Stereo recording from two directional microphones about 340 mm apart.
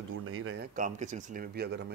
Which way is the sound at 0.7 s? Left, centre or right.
Right.